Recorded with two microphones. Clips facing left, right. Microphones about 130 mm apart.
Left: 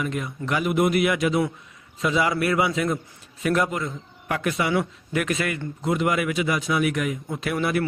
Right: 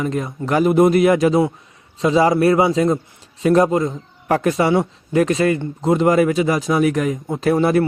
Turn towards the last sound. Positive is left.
turn(degrees=-35)  # may be behind; listen again after turning